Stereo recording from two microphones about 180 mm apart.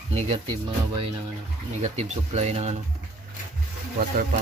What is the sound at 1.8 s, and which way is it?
Speech, 40° right (ahead or behind).